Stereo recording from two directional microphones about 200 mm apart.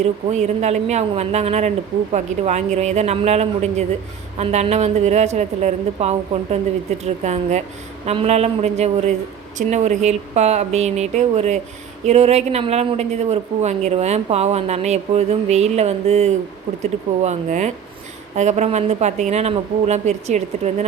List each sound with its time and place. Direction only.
0.0 s a woman's voice: 35° right (ahead or behind)